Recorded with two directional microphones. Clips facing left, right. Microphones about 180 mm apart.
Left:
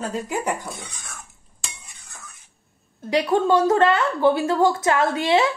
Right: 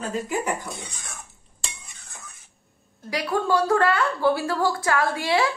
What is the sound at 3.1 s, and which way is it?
A woman's voice, 25° left (ahead or behind).